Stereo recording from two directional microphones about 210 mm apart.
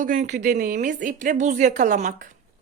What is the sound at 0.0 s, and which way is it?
A woman's voice, 40° right (ahead or behind).